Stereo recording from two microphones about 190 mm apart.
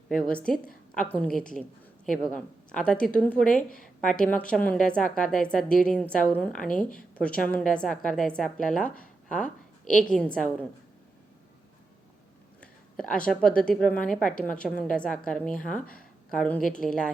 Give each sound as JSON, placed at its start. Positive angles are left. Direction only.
{"t": 0.1, "sound": "a woman's voice", "side_deg": 5}
{"t": 13.1, "sound": "a woman's voice", "side_deg": 5}
{"t": 14.2, "sound": "a woman's voice", "side_deg": 45}
{"t": 14.4, "sound": "a woman's voice", "side_deg": 5}